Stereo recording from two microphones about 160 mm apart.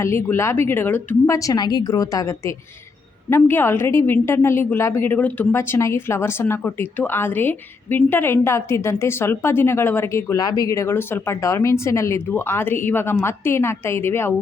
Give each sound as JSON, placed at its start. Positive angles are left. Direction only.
{"t": 0.0, "sound": "a woman's voice", "side_deg": 15}